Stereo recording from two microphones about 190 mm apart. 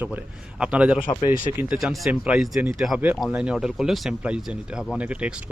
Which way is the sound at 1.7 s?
Centre (ahead or behind).